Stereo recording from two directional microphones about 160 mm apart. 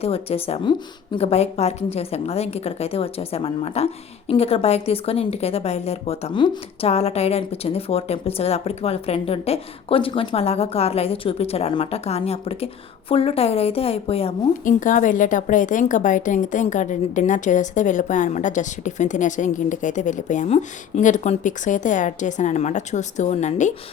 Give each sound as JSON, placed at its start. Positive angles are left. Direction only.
{"t": 0.0, "sound": "a woman's voice", "side_deg": 35}
{"t": 14.6, "sound": "a woman's voice", "side_deg": 55}